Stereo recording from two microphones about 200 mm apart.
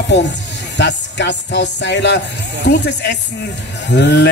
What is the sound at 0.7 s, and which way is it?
Speech, 60° left (ahead or behind).